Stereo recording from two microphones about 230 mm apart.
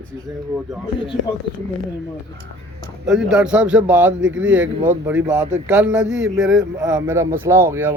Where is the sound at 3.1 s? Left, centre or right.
Centre.